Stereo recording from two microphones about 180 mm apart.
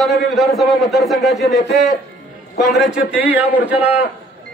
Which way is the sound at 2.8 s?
5° right (ahead or behind).